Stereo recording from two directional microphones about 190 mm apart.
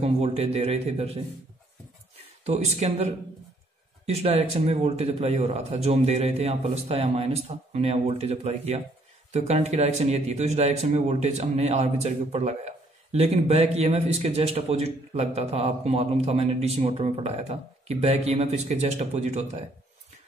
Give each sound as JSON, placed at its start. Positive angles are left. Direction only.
{"t": 0.0, "sound": "speech", "side_deg": -35}
{"t": 2.4, "sound": "speech", "side_deg": -35}